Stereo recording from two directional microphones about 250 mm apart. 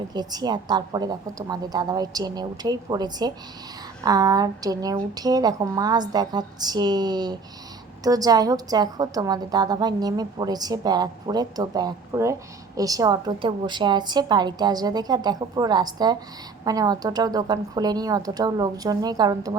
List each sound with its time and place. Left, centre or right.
0.1 s a woman's voice: centre